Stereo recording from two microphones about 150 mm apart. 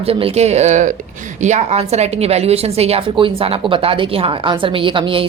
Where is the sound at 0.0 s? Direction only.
40° right (ahead or behind).